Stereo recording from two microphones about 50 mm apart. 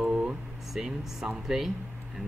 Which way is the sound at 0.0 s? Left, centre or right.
Right.